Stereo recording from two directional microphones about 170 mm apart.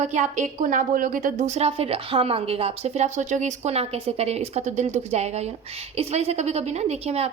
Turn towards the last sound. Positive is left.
turn(degrees=-40)  # may be behind; listen again after turning